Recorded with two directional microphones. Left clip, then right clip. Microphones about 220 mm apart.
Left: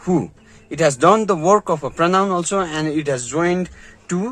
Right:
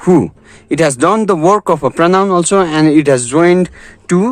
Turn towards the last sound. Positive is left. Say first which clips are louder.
# right 11 dB
turn(degrees=-45)  # may be behind; listen again after turning